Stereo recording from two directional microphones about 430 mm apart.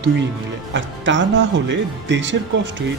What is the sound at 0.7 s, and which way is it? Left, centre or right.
Speech, right.